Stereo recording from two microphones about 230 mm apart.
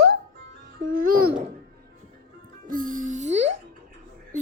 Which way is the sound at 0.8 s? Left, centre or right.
Right.